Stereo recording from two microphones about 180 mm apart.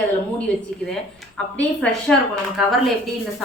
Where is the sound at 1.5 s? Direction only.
5° left (ahead or behind).